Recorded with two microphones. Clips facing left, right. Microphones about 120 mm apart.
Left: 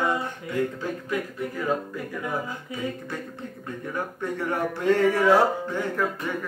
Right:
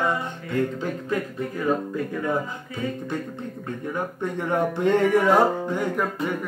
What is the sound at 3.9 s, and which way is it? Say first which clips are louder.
Speech: right 1 dB; 20° right (ahead or behind).